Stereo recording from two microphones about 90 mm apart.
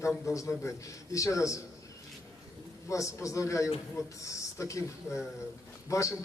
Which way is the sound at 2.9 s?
35° left (ahead or behind).